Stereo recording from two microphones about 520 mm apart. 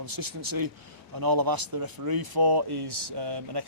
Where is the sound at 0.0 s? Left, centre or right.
Right.